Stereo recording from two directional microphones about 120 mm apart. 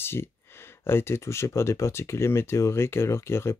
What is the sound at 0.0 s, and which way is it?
Speech, 20° left (ahead or behind).